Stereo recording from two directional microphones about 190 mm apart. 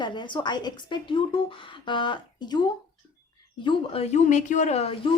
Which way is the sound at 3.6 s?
30° left (ahead or behind).